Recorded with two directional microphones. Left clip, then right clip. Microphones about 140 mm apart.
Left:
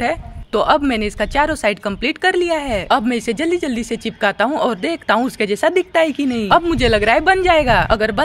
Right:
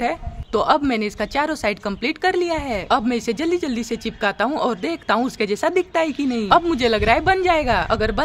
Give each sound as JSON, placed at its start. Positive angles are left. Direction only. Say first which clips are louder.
{"t": 0.0, "sound": "speech", "louder": "left 3 dB", "side_deg": 25}